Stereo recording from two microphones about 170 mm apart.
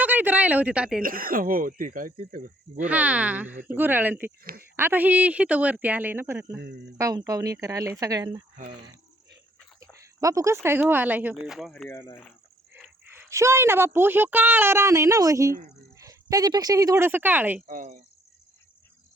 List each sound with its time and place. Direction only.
0.0 s speech: 10° right (ahead or behind)
1.0 s speech: 55° right (ahead or behind)
2.8 s speech: 10° right (ahead or behind)
6.6 s speech: 80° right
7.0 s speech: 20° right (ahead or behind)
10.2 s speech: 20° right (ahead or behind); by 11.7 s 5° right (ahead or behind)
11.7 s speech: 10° left (ahead or behind)
12.7 s speech: 10° right (ahead or behind)
17.7 s speech: 50° right (ahead or behind)